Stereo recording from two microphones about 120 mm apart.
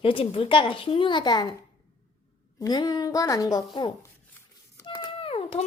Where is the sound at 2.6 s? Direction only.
35° left (ahead or behind).